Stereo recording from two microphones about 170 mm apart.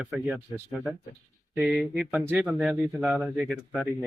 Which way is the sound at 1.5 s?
5° right (ahead or behind).